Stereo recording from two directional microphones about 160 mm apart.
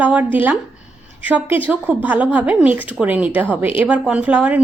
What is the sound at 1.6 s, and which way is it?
Speech, 10° right (ahead or behind).